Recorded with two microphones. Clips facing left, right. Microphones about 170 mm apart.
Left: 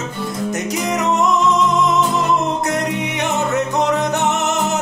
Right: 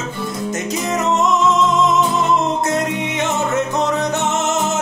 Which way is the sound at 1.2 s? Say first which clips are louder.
Even; 20° right (ahead or behind).